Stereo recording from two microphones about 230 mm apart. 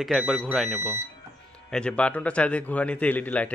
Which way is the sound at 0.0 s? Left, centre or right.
Centre.